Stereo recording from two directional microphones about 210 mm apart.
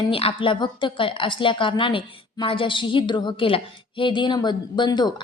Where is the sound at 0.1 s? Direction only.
25° left (ahead or behind).